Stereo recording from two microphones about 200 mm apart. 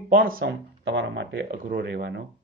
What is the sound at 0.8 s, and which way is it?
Speech, 60° right (ahead or behind).